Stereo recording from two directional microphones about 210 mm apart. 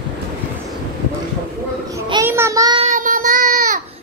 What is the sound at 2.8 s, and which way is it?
Child singing, 40° right (ahead or behind).